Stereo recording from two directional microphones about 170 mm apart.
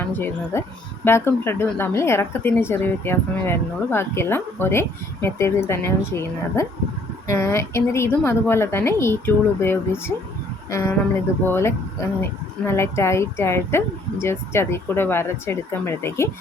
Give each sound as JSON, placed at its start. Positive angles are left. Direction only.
{"t": 0.0, "sound": "a woman's voice", "side_deg": 10}